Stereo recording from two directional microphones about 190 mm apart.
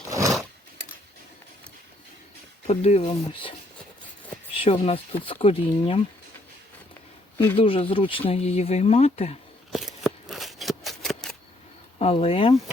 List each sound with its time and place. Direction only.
2.6 s speech: 35° left (ahead or behind)
4.5 s speech: 30° left (ahead or behind)
7.5 s speech: 30° left (ahead or behind)
9.7 s a sound: centre (ahead or behind)
11.9 s speech: 30° left (ahead or behind)